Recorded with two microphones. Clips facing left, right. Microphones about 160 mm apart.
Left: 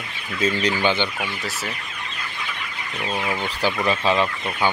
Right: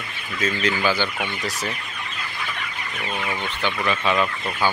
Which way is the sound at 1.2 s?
5° left (ahead or behind).